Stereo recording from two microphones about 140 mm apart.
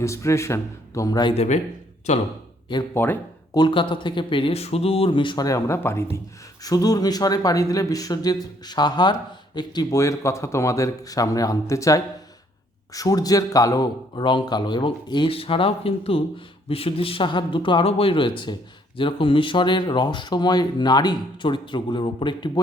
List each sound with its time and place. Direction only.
0.0 s speech: 20° left (ahead or behind)
1.3 s speech: 50° left (ahead or behind)
2.9 s speech: 15° left (ahead or behind)
3.5 s speech: 35° left (ahead or behind)